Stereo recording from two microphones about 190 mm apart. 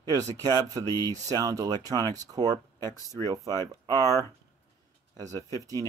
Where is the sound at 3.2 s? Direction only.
20° right (ahead or behind).